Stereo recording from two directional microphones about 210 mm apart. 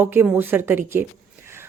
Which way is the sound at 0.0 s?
10° right (ahead or behind).